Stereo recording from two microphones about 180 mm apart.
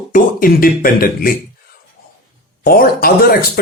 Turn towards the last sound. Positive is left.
turn(degrees=55)  # may be behind; listen again after turning